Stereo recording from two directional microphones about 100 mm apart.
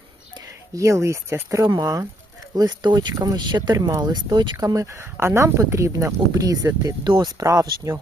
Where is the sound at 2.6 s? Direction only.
45° right (ahead or behind).